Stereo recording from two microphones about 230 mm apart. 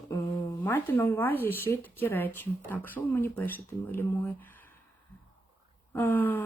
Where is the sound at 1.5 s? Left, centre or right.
Centre.